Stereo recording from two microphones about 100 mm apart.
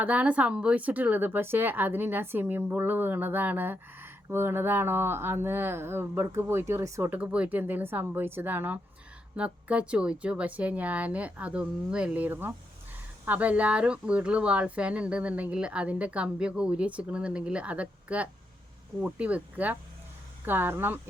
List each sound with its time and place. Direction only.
0.0 s speech: 15° right (ahead or behind); by 7.1 s 30° right (ahead or behind)
7.1 s speech: 15° right (ahead or behind)